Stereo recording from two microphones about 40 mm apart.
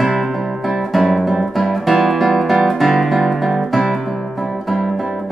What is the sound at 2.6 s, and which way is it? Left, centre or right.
Music, centre.